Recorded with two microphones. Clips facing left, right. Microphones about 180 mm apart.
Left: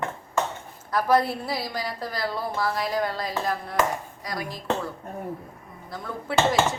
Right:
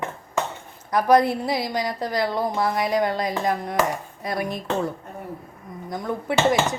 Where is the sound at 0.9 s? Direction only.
20° right (ahead or behind).